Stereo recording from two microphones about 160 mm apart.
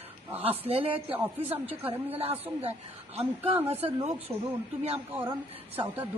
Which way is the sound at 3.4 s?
35° right (ahead or behind).